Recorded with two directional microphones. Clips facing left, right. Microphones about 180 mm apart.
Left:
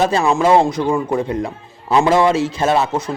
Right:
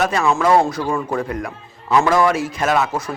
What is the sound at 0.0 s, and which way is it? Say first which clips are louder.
A man's voice: left 3 dB; 30° left (ahead or behind).